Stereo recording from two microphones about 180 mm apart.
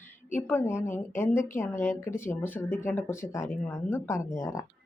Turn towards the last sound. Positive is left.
turn(degrees=15)  # may be behind; listen again after turning